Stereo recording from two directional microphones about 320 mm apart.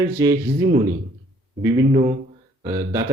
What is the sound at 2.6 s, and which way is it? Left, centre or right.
Speech, centre.